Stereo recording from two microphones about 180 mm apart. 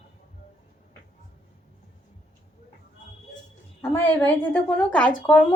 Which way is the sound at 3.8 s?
10° left (ahead or behind).